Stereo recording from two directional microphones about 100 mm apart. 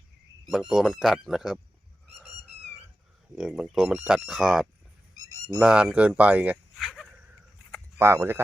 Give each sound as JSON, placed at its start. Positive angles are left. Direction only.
{"t": 0.5, "sound": "speech", "side_deg": -5}
{"t": 3.3, "sound": "speech", "side_deg": -5}
{"t": 6.7, "sound": "a sound", "side_deg": 0}
{"t": 7.9, "sound": "speech", "side_deg": -25}